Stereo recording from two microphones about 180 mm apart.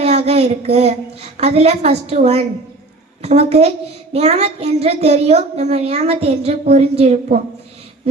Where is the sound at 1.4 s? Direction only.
35° right (ahead or behind).